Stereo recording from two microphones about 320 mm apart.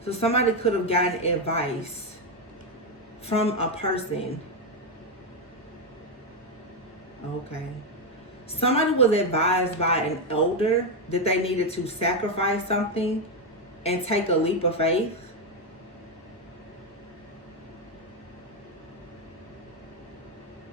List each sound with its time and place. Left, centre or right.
0.0 s speech: centre
3.2 s speech: centre
8.6 s speech: centre